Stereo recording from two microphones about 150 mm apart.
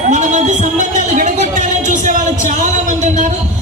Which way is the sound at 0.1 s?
55° right (ahead or behind).